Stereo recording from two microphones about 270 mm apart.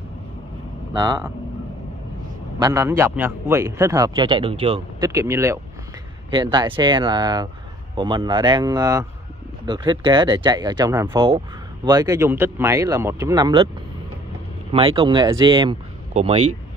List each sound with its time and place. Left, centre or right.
2.6 s speech: centre
14.7 s speech: centre